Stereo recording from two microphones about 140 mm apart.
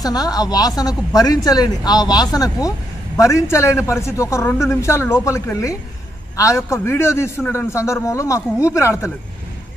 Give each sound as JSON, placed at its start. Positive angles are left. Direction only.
{"t": 0.0, "sound": "speech", "side_deg": 25}